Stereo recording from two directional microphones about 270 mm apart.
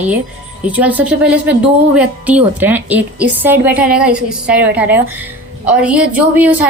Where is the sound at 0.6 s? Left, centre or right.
Centre.